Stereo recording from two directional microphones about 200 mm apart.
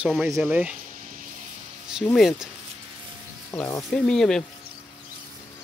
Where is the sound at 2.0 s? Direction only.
Centre (ahead or behind).